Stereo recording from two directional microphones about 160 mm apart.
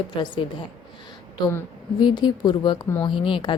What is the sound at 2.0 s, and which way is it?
A woman's voice, 30° left (ahead or behind).